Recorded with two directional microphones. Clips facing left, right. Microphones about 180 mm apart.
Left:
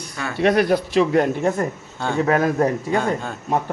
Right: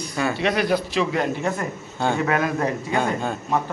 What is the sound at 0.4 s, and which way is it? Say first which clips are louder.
A man's voice: left 7 dB; 50° left (ahead or behind).